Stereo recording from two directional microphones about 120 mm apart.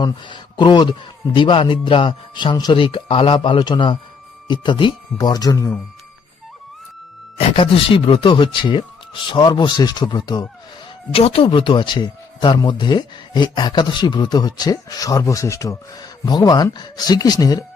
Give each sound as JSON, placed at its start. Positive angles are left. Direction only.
{"t": 0.0, "sound": "speech", "side_deg": 40}
{"t": 7.3, "sound": "speech", "side_deg": 45}
{"t": 11.1, "sound": "speech", "side_deg": 55}